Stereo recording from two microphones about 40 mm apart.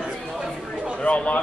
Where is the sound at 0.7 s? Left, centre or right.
Right.